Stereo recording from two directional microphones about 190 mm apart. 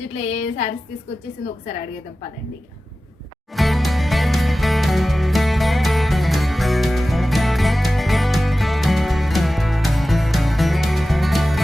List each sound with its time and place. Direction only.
0.2 s a woman's voice: 35° left (ahead or behind)
3.5 s music: centre (ahead or behind)